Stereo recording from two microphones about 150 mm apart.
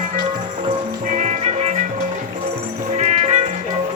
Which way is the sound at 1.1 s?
55° right (ahead or behind).